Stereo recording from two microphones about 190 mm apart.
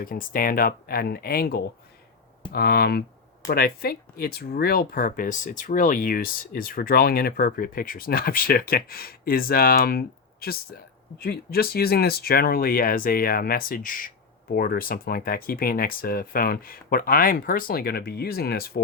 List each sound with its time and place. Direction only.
0.0 s speech: 50° left (ahead or behind)